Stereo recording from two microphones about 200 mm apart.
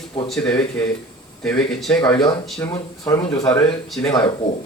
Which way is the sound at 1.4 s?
5° left (ahead or behind).